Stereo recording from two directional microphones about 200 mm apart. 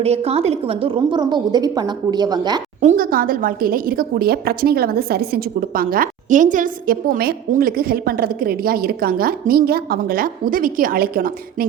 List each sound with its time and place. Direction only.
0.0 s a woman's voice: 30° right (ahead or behind)
2.8 s a woman's voice: 45° right (ahead or behind)